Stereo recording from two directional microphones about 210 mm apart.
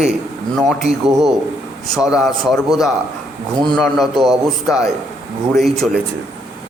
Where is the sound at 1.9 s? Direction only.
5° right (ahead or behind).